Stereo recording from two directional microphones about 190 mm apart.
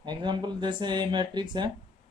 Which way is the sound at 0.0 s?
25° right (ahead or behind).